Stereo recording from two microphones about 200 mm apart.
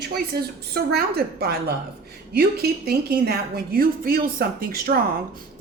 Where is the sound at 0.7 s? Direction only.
50° right (ahead or behind).